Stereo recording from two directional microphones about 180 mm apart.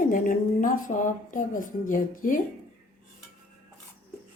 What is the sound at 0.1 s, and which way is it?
Speech, 50° left (ahead or behind).